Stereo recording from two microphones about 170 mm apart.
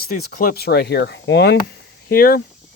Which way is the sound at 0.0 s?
60° left (ahead or behind).